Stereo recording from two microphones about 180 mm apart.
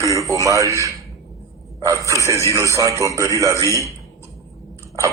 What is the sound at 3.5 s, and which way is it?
Speech, 15° left (ahead or behind).